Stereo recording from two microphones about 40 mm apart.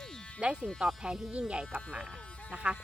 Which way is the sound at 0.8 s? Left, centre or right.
Right.